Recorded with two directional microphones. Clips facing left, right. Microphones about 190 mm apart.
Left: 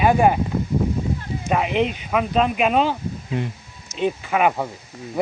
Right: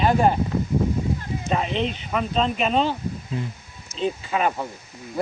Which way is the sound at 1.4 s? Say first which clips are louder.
Left 4 dB; 15° left (ahead or behind).